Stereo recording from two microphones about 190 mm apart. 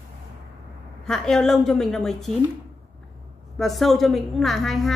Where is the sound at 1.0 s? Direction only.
5° left (ahead or behind).